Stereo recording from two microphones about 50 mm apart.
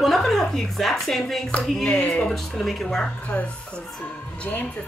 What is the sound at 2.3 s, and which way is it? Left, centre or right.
Speech, centre.